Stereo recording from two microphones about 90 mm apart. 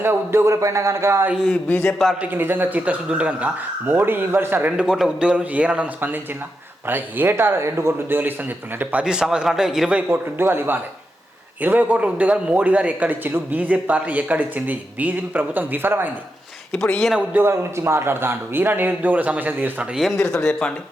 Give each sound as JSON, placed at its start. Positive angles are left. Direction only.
{"t": 0.0, "sound": "speech", "side_deg": -25}
{"t": 1.5, "sound": "speech", "side_deg": 15}
{"t": 2.2, "sound": "a man's voice", "side_deg": -20}
{"t": 4.8, "sound": "a man's voice", "side_deg": -5}
{"t": 10.1, "sound": "a man's voice", "side_deg": -25}
{"t": 17.4, "sound": "a man's voice", "side_deg": -30}
{"t": 20.0, "sound": "speech", "side_deg": 5}